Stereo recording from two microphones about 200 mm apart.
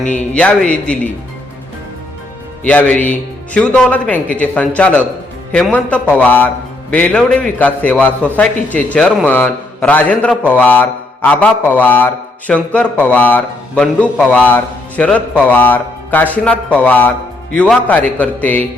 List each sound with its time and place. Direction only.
0.3 s speech: 5° left (ahead or behind)
2.6 s a man's voice: 5° left (ahead or behind)